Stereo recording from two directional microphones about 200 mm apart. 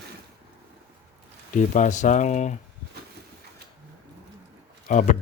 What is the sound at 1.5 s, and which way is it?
Speech, 40° left (ahead or behind).